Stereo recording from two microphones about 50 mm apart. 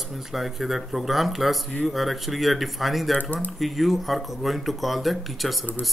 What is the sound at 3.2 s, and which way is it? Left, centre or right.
Speech, left.